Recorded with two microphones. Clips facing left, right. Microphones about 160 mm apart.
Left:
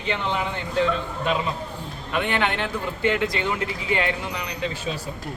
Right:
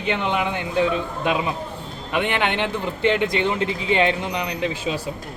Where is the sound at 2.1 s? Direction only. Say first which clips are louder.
Right 2 dB; 20° right (ahead or behind).